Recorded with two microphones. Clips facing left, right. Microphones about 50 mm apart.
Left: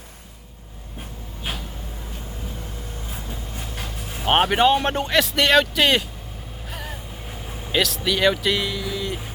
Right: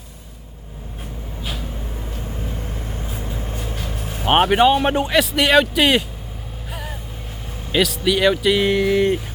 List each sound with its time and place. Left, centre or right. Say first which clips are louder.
4.2 s speech: right 3 dB; centre
6.7 s vehicle: right 2 dB; centre
7.7 s speech: right 4 dB; centre
8.7 s speech: right 11 dB; right